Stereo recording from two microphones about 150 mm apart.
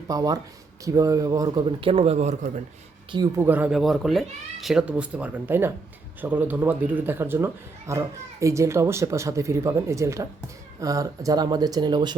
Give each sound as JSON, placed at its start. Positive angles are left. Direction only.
{"t": 0.1, "sound": "a man's voice", "side_deg": -25}
{"t": 3.3, "sound": "speech", "side_deg": -15}
{"t": 3.8, "sound": "a man's voice", "side_deg": 0}